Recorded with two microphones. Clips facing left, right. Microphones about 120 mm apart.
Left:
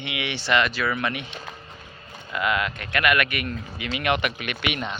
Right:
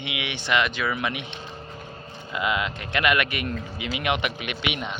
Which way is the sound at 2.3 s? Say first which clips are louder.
Left 1 dB; 20° right (ahead or behind).